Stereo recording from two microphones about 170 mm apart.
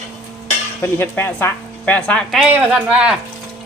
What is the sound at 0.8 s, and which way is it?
A woman's voice, 15° left (ahead or behind).